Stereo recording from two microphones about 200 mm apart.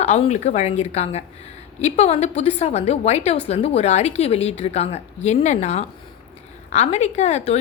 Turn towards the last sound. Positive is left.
turn(degrees=30)  # may be behind; listen again after turning